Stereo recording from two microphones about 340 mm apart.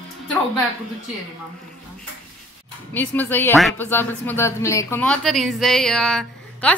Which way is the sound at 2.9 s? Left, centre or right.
Centre.